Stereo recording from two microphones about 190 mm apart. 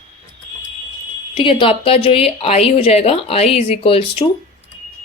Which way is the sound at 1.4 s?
30° left (ahead or behind).